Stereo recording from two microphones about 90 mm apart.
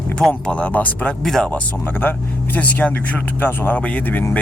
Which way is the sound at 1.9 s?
20° left (ahead or behind).